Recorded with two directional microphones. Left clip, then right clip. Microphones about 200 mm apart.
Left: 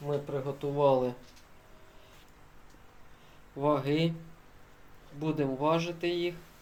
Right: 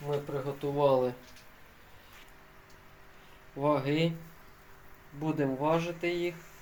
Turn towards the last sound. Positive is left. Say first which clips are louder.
# even
turn(degrees=0)  # may be behind; listen again after turning